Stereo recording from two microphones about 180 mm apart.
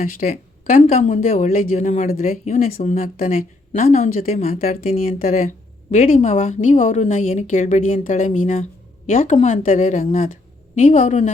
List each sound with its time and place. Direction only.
0.0 s speech: 50° left (ahead or behind)
1.2 s speech: 45° left (ahead or behind)
2.3 s a woman's voice: 35° left (ahead or behind)
2.6 s a woman's voice: 50° left (ahead or behind)
6.1 s a woman's voice: 35° left (ahead or behind)